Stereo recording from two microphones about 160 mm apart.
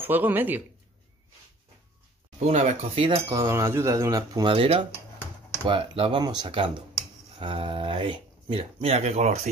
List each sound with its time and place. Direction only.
0.0 s speech: 10° right (ahead or behind)
2.3 s speech: 45° right (ahead or behind)
3.3 s speech: 20° right (ahead or behind); by 9.5 s 45° right (ahead or behind)